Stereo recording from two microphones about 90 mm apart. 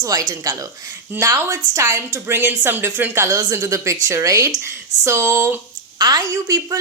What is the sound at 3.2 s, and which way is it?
Speech, 50° right (ahead or behind).